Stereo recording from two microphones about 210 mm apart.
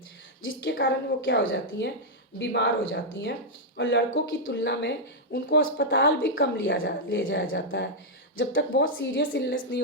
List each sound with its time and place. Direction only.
0.6 s speech: 55° left (ahead or behind)